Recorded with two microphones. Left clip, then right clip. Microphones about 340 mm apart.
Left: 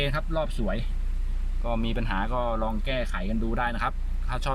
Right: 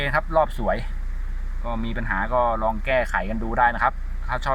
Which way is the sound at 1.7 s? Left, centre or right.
Centre.